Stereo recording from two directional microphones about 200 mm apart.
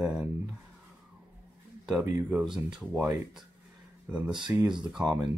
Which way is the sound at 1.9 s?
5° right (ahead or behind).